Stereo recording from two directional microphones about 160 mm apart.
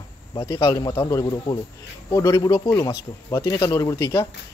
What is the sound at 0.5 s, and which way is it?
Speech, 20° left (ahead or behind).